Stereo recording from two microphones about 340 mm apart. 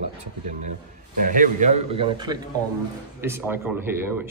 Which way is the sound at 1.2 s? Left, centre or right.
Right.